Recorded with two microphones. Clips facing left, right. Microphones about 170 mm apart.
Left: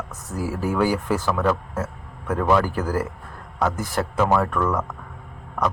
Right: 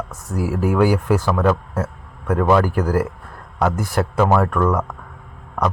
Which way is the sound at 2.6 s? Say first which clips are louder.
Right 5 dB; 50° right (ahead or behind).